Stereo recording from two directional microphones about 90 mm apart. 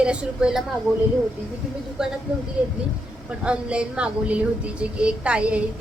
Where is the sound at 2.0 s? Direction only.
5° right (ahead or behind).